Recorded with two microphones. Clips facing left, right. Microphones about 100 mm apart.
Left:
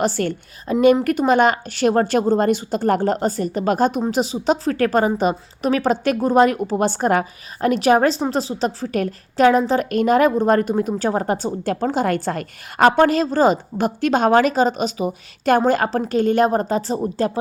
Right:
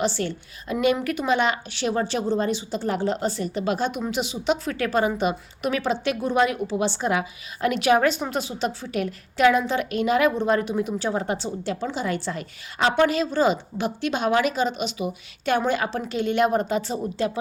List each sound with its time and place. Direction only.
0.0 s a woman's voice: 50° left (ahead or behind)
0.7 s a woman's voice: 35° left (ahead or behind)